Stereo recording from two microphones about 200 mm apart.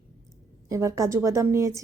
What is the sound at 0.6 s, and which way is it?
A woman's voice, 15° right (ahead or behind).